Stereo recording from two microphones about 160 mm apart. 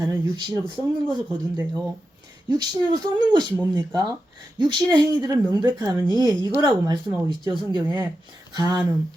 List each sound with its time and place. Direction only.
0.0 s a woman's voice: 20° right (ahead or behind)